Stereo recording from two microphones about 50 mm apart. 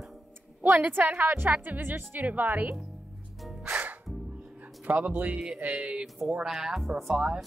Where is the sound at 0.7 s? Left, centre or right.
Right.